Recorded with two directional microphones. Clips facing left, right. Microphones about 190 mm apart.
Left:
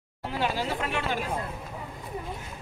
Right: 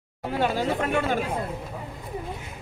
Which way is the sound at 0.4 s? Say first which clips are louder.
Right 4 dB; 50° right (ahead or behind).